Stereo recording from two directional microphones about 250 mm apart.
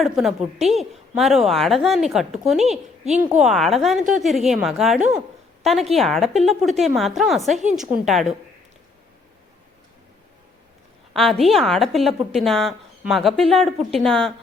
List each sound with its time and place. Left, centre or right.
0.0 s a woman's voice: centre
11.1 s a woman's voice: centre